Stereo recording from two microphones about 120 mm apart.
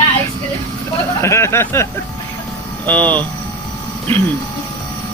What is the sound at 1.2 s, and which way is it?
Speech, 25° left (ahead or behind).